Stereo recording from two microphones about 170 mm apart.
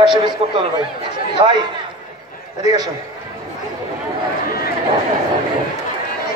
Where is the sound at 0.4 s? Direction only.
35° right (ahead or behind).